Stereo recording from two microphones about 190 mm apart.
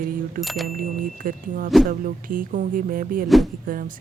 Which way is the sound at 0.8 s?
45° right (ahead or behind).